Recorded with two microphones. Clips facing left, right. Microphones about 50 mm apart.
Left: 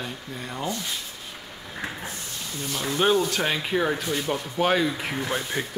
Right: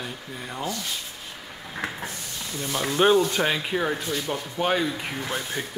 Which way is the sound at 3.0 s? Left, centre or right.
Centre.